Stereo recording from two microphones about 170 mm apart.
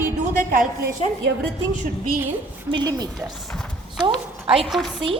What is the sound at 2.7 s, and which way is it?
Speech, 25° right (ahead or behind).